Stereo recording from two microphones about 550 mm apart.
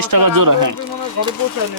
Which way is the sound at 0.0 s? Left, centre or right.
Right.